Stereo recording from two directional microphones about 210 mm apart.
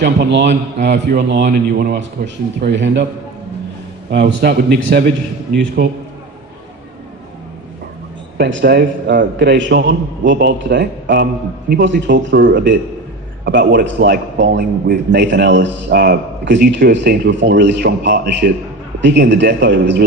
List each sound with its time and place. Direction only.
0.0 s a man's voice: 55° right (ahead or behind)
4.1 s a man's voice: 55° right (ahead or behind)
8.4 s a man's voice: 55° right (ahead or behind)
10.7 s a man's voice: 40° right (ahead or behind)
15.3 s a man's voice: 60° right (ahead or behind)